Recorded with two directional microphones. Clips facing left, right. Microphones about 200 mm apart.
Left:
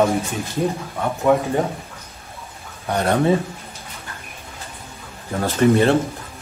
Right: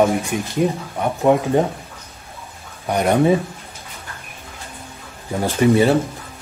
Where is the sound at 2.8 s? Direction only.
10° right (ahead or behind).